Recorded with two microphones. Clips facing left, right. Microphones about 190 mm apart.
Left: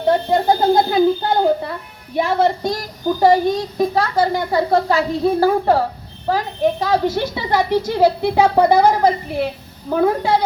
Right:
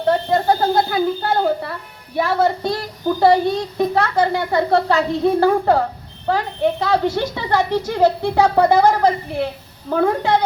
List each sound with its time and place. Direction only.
0.1 s speech: 15° left (ahead or behind)